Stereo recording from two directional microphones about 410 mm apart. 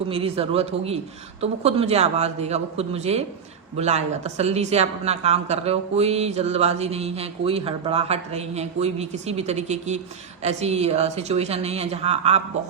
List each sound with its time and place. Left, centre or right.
0.1 s speech: centre